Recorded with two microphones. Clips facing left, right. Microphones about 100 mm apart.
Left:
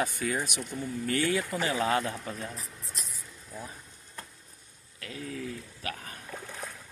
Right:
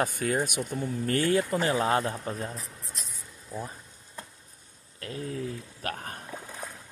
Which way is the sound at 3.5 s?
15° right (ahead or behind).